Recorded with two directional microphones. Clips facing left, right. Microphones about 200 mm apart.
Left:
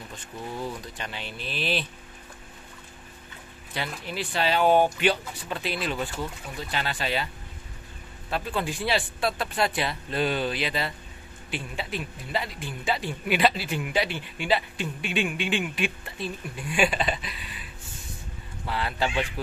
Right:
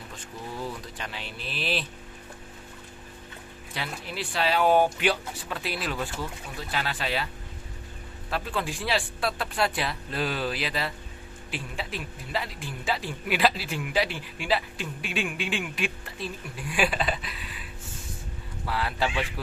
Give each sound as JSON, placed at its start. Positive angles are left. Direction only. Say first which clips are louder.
{"t": 0.9, "sound": "a man's voice", "louder": "left 1 dB", "side_deg": 0}
{"t": 3.7, "sound": "a man's voice", "louder": "left 2 dB", "side_deg": 0}
{"t": 8.3, "sound": "a man's voice", "louder": "left 1 dB", "side_deg": 0}